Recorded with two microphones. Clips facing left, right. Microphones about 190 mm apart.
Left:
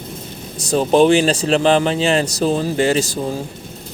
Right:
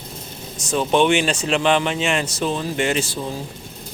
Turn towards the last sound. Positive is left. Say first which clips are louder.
# left 5 dB
turn(degrees=40)  # may be behind; listen again after turning